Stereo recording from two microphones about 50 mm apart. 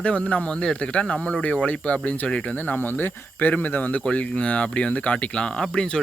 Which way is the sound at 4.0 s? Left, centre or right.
Left.